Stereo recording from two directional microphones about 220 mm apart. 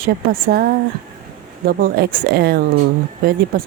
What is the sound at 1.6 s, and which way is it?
Speech, 40° right (ahead or behind).